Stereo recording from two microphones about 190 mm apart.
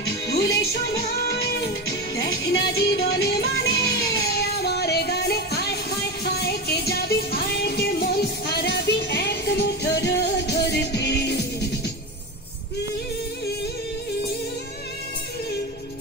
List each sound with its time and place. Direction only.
0.3 s music: 60° left (ahead or behind)